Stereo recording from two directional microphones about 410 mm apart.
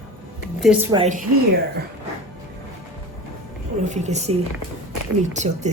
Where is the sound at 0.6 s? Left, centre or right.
Centre.